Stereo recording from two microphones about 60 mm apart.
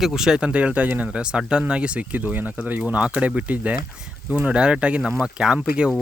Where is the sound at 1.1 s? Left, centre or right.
Centre.